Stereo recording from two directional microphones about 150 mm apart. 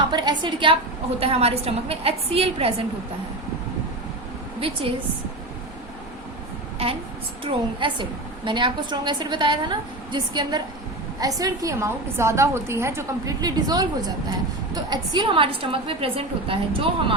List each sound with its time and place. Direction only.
0.1 s a woman's voice: 30° right (ahead or behind)
7.4 s a woman's voice: 35° right (ahead or behind)